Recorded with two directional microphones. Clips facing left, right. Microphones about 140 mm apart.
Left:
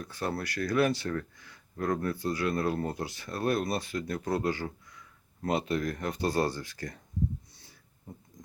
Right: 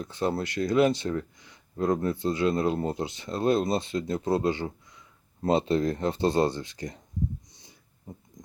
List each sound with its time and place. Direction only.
0.0 s speech: 20° right (ahead or behind)
7.6 s dog: 20° right (ahead or behind)